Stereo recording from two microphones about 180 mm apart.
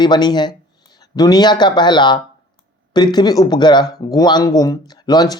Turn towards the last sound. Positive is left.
turn(degrees=20)  # may be behind; listen again after turning